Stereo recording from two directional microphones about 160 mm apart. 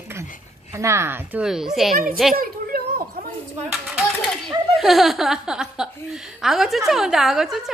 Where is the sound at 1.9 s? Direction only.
60° right (ahead or behind).